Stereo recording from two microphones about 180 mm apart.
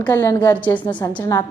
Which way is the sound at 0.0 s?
15° left (ahead or behind).